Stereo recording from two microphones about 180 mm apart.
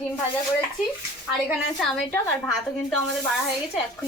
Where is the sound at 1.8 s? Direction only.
5° left (ahead or behind).